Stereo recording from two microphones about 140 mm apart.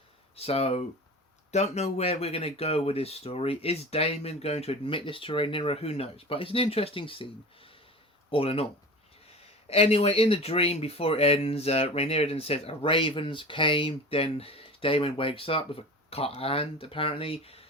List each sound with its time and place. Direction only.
0.3 s speech: 45° left (ahead or behind)
9.6 s speech: 45° left (ahead or behind)